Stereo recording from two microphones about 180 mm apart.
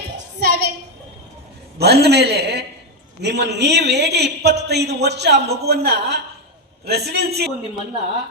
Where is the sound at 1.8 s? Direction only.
65° right (ahead or behind).